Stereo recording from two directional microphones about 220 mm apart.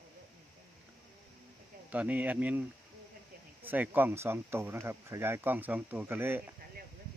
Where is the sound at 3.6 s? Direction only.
10° right (ahead or behind).